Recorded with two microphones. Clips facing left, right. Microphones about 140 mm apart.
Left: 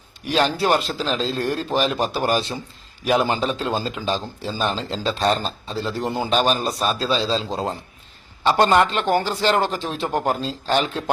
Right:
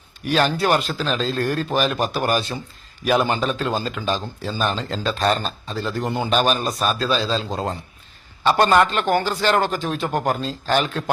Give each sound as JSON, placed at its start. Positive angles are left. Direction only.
{"t": 0.3, "sound": "speech", "side_deg": 25}